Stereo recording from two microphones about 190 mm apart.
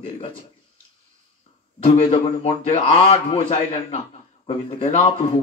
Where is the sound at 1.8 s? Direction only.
30° left (ahead or behind).